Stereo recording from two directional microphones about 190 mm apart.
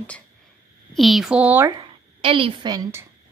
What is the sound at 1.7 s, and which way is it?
Speech, 30° right (ahead or behind).